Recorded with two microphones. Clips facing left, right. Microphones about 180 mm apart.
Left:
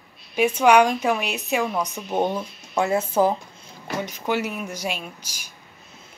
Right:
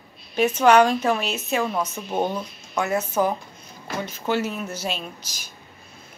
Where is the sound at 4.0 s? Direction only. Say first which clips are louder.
Right 1 dB; 15° left (ahead or behind).